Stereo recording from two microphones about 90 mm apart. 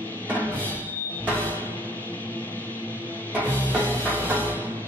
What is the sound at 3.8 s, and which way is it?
Music, 20° right (ahead or behind).